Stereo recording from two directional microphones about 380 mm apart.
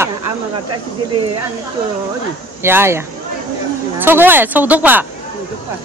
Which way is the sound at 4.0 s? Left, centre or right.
Centre.